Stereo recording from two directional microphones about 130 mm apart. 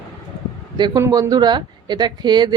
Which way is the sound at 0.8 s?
35° right (ahead or behind).